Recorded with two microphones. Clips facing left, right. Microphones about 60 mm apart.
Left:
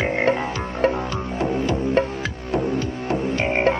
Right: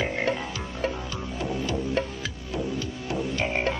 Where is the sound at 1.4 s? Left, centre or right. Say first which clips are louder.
Left 7 dB; left.